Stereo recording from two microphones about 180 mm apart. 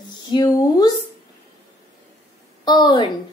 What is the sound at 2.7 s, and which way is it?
Speech, 25° left (ahead or behind).